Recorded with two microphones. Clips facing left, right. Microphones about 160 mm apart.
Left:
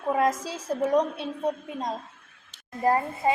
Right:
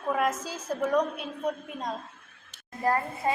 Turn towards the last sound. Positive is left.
turn(degrees=20)  # may be behind; listen again after turning